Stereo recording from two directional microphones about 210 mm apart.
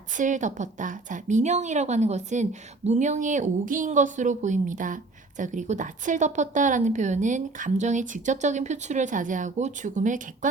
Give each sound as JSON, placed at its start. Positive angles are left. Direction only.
{"t": 0.2, "sound": "a woman's voice", "side_deg": -35}